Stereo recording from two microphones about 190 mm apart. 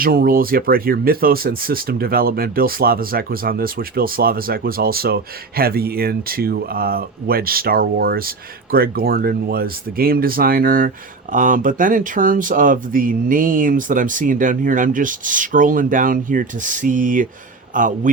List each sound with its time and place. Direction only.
0.0 s speech: 50° right (ahead or behind)